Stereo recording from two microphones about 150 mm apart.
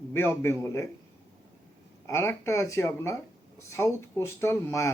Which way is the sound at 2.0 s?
20° left (ahead or behind).